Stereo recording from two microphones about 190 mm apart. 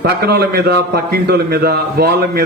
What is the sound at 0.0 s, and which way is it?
A man's voice, 55° right (ahead or behind).